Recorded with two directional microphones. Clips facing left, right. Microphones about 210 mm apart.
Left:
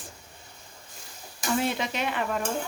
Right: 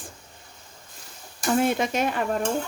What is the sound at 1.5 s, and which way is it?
Dishes, 50° right (ahead or behind).